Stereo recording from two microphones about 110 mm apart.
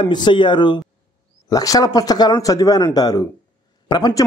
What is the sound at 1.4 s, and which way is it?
A man's voice, 35° left (ahead or behind).